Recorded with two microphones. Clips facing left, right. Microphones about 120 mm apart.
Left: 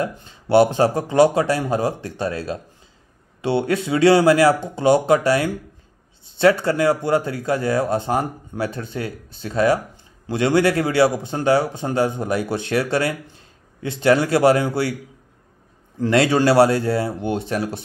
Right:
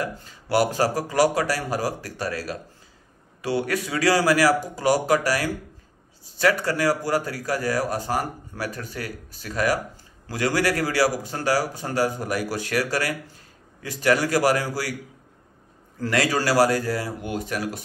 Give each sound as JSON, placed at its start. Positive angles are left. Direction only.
{"t": 0.0, "sound": "speech", "side_deg": 25}
{"t": 16.0, "sound": "speech", "side_deg": 25}